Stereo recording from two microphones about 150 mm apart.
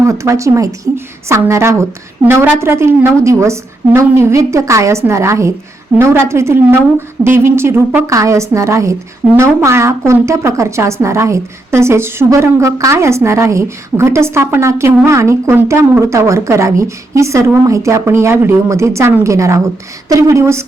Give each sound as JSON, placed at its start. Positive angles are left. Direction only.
{"t": 0.0, "sound": "a woman's voice", "side_deg": -20}